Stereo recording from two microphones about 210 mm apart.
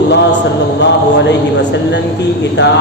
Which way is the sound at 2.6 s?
55° left (ahead or behind).